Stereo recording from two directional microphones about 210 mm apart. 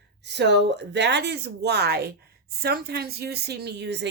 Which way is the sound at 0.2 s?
55° right (ahead or behind).